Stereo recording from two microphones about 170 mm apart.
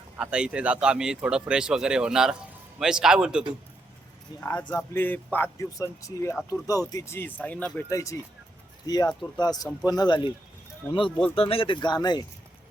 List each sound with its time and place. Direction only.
0.2 s speech: 5° right (ahead or behind)
4.4 s speech: 15° left (ahead or behind)
11.3 s speech: 35° left (ahead or behind)